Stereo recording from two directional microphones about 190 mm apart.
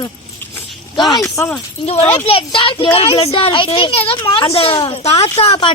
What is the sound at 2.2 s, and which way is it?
A woman's voice, 30° left (ahead or behind).